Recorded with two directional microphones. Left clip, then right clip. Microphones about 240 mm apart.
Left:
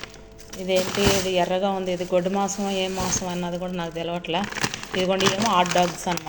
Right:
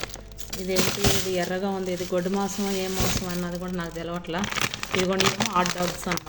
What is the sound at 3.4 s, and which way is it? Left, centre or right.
Speech, centre.